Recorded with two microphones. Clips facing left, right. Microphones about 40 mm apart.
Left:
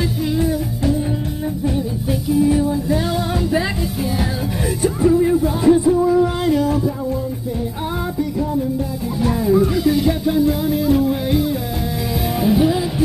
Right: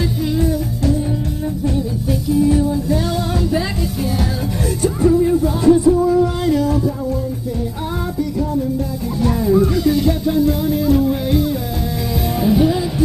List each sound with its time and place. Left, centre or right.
0.4 s music: centre
2.3 s music: centre
4.8 s music: centre
9.2 s music: centre